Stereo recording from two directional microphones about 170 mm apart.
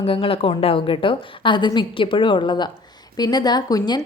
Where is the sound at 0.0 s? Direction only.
35° left (ahead or behind).